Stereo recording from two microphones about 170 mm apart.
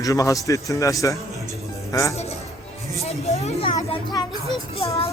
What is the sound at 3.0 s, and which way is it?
A man's voice, 40° left (ahead or behind).